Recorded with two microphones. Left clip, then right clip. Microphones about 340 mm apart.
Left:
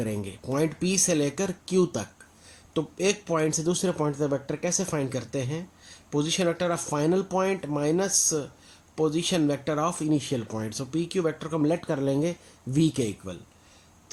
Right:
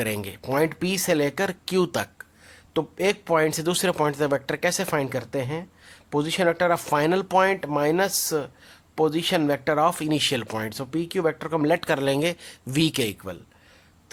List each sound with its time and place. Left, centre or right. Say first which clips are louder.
0.0 s speech: right 4 dB; right